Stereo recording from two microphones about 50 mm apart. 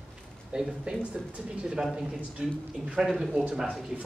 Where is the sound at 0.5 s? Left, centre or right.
Centre.